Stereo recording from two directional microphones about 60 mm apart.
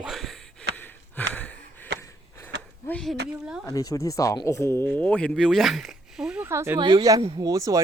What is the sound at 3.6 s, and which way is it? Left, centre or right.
Speech, left.